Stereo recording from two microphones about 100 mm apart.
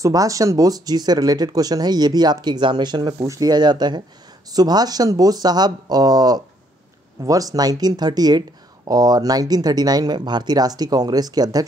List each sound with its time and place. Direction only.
0.0 s speech: 35° right (ahead or behind)